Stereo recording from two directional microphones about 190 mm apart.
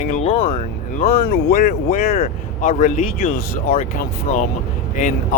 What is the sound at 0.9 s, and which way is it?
Speech, 40° left (ahead or behind).